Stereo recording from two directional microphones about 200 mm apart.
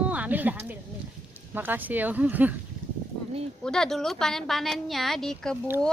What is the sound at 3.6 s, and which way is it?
A woman's voice, 5° left (ahead or behind).